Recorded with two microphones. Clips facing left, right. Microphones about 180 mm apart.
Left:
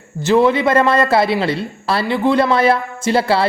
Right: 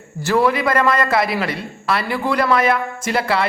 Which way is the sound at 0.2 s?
20° left (ahead or behind).